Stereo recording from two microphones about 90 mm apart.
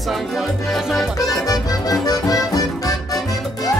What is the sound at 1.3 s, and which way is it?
Music, 40° left (ahead or behind).